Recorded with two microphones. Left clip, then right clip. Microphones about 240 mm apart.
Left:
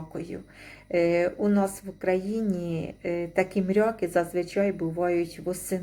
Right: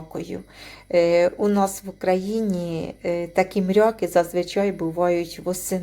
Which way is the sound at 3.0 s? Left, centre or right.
Right.